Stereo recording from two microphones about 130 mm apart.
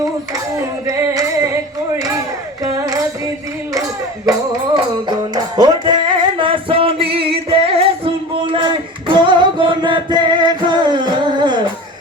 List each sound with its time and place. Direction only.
0.9 s music: 25° right (ahead or behind)
4.7 s music: 35° right (ahead or behind)